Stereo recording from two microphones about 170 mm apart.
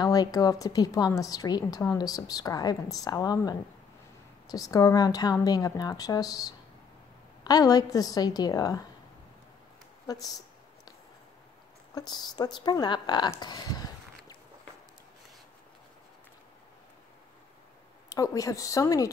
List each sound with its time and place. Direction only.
0.0 s a woman's voice: 20° left (ahead or behind)
11.9 s a woman's voice: 25° left (ahead or behind)
18.1 s a woman's voice: 20° left (ahead or behind)